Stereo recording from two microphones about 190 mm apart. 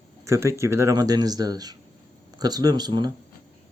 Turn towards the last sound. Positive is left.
turn(degrees=-20)  # may be behind; listen again after turning